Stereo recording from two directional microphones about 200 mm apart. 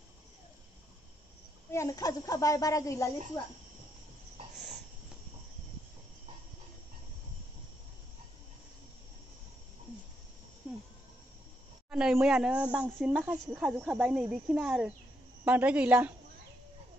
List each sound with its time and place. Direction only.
1.7 s speech: 15° left (ahead or behind)
11.9 s a woman's voice: 5° right (ahead or behind)